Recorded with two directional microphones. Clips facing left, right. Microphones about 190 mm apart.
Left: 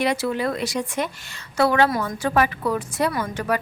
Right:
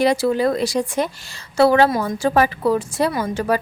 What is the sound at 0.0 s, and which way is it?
A woman's voice, 35° right (ahead or behind).